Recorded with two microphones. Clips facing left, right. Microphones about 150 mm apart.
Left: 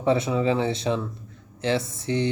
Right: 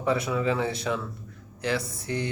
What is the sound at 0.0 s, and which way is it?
Speech, 25° left (ahead or behind).